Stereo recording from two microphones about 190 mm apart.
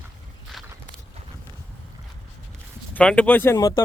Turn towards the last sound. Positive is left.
turn(degrees=15)  # may be behind; listen again after turning